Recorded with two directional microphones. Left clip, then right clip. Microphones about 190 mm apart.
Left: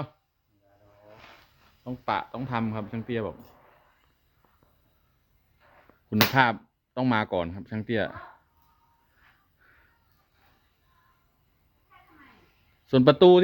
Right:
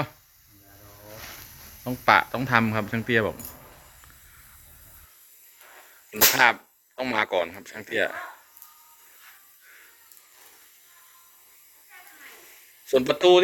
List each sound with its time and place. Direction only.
1.8 s speech: 10° left (ahead or behind)
6.1 s speech: 15° left (ahead or behind)
12.8 s a sound: 15° left (ahead or behind)
13.1 s speech: 30° left (ahead or behind)